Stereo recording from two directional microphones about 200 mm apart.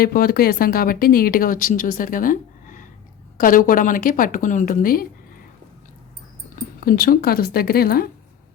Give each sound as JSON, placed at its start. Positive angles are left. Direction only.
{"t": 0.0, "sound": "speech", "side_deg": 45}
{"t": 6.7, "sound": "speech", "side_deg": 45}